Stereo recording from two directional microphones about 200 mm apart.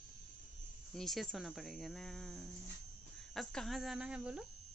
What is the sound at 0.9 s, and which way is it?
Speech, centre (ahead or behind).